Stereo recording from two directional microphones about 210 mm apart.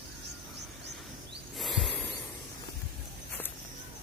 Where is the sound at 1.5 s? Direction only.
Centre (ahead or behind).